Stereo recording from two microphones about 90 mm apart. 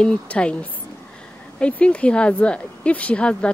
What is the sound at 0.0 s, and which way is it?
Speech, 10° left (ahead or behind).